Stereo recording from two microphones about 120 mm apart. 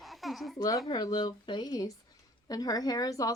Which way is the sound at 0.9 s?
40° left (ahead or behind).